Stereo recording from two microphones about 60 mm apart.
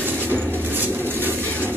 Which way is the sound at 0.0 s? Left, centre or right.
Right.